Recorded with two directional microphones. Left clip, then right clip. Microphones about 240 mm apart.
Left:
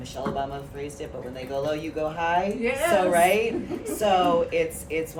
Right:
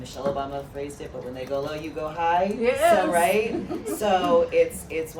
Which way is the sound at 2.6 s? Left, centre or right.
Centre.